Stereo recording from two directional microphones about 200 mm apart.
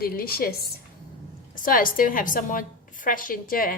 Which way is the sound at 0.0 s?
50° left (ahead or behind).